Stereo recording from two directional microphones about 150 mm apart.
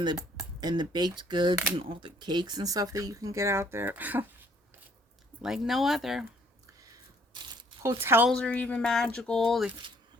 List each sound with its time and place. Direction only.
0.6 s speech: 30° right (ahead or behind); by 4.3 s 10° right (ahead or behind)
5.4 s speech: centre (ahead or behind)
7.8 s speech: 15° right (ahead or behind)
8.3 s speech: 10° left (ahead or behind)